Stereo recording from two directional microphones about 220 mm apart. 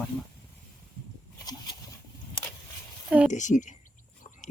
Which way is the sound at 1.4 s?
15° left (ahead or behind).